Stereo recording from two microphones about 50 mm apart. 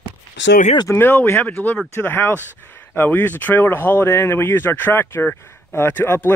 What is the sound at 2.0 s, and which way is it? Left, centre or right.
Speech, left.